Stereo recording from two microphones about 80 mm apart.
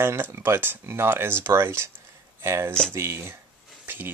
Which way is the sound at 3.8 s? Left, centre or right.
Right.